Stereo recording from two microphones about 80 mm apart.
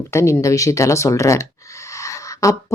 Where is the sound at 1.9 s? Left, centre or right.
Left.